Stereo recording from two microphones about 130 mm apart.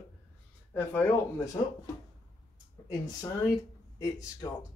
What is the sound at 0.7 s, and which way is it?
Speech, 20° left (ahead or behind).